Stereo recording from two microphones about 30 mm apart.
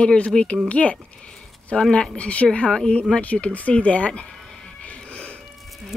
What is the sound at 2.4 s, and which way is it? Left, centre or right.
Speech, left.